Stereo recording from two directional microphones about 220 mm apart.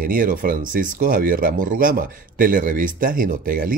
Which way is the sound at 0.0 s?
40° right (ahead or behind).